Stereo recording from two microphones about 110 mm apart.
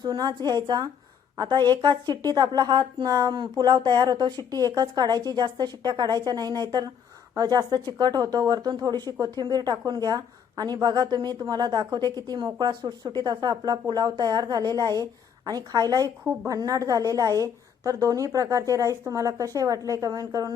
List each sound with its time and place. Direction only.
0.0 s a woman's voice: 40° right (ahead or behind)